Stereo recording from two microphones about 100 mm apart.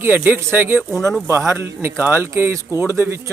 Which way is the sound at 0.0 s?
20° right (ahead or behind).